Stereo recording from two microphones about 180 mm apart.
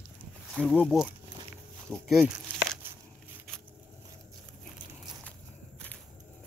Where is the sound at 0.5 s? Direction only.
5° right (ahead or behind).